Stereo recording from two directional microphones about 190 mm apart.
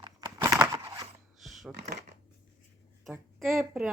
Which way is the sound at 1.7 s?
60° right (ahead or behind).